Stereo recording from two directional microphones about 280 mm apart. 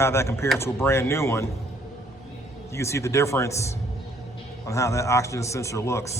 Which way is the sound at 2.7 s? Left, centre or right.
Centre.